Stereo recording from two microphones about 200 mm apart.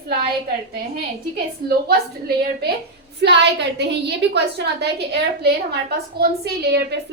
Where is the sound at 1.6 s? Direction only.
50° right (ahead or behind).